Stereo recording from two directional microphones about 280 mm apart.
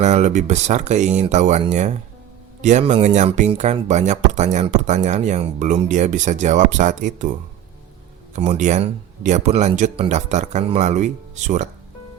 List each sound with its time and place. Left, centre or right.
0.0 s speech: right
8.4 s speech: right